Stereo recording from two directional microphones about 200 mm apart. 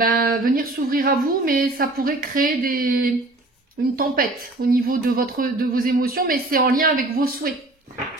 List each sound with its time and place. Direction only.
0.0 s a woman's voice: 45° right (ahead or behind)